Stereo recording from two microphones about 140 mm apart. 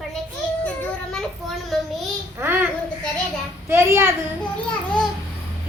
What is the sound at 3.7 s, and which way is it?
Speech, 20° right (ahead or behind).